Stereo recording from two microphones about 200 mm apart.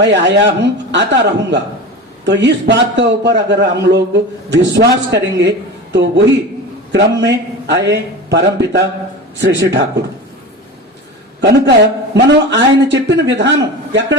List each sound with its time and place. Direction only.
0.0 s a man's voice: 60° right (ahead or behind)
11.3 s a man's voice: 60° right (ahead or behind)